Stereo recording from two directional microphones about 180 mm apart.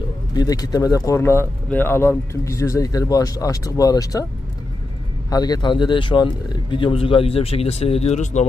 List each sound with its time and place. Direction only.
0.3 s speech: 20° left (ahead or behind)
5.3 s speech: 20° left (ahead or behind); by 8.4 s 40° left (ahead or behind)